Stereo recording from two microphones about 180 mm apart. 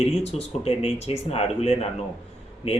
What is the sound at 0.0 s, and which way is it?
Speech, 35° left (ahead or behind).